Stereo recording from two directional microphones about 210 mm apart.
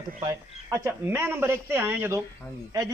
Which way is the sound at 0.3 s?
10° right (ahead or behind).